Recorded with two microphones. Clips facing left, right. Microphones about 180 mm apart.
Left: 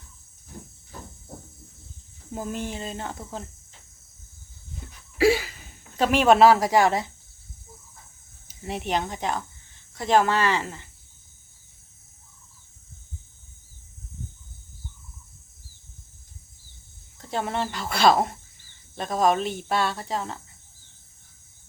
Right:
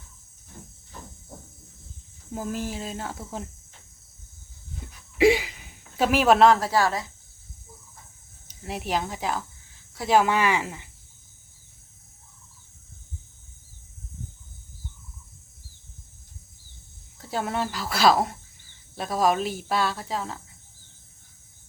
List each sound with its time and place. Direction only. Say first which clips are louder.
2.3 s speech: right 1 dB; 5° right (ahead or behind)
5.1 s a sound: right 1 dB; 15° right (ahead or behind); by 7.1 s 20° left (ahead or behind)
8.6 s speech: left 1 dB; centre (ahead or behind)
17.2 s speech: even; 5° right (ahead or behind)